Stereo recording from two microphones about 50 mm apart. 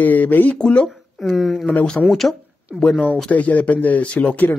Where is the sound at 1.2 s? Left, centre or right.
Centre.